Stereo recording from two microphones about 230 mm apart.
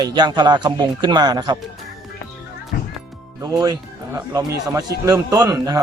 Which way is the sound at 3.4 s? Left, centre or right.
Centre.